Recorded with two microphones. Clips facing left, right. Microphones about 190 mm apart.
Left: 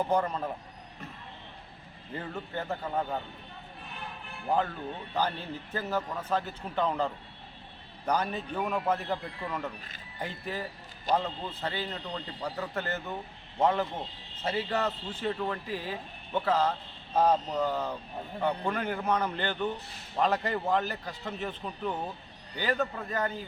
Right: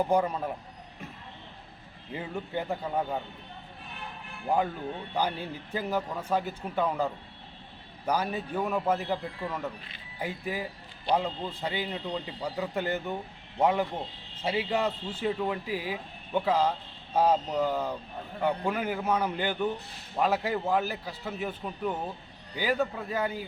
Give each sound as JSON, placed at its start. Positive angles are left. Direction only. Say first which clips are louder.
{"t": 0.0, "sound": "speech", "louder": "right 2 dB", "side_deg": -10}
{"t": 2.1, "sound": "speech", "louder": "right 3 dB", "side_deg": -10}
{"t": 4.4, "sound": "speech", "louder": "right 1 dB", "side_deg": -10}